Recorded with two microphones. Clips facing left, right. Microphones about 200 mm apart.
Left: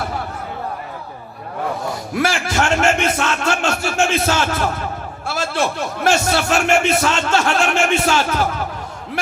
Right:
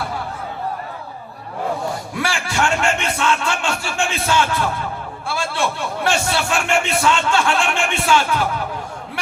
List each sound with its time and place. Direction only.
2.1 s speech: 40° left (ahead or behind)